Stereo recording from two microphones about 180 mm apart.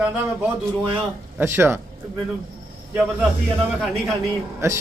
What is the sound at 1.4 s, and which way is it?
Speech, 15° right (ahead or behind).